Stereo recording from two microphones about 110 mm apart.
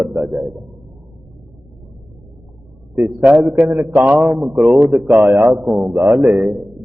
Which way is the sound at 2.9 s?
5° right (ahead or behind).